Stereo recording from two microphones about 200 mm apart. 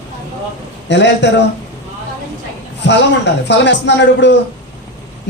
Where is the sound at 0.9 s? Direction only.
60° left (ahead or behind).